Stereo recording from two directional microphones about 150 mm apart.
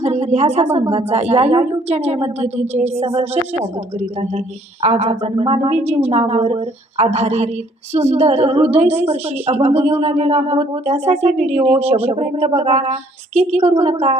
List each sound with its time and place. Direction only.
0.0 s a woman's voice: 45° right (ahead or behind)